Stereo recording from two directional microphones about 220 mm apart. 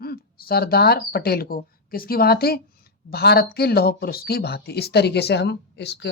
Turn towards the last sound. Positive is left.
turn(degrees=50)  # may be behind; listen again after turning